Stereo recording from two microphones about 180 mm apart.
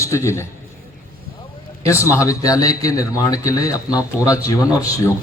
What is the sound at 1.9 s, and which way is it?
A man's voice, 15° left (ahead or behind).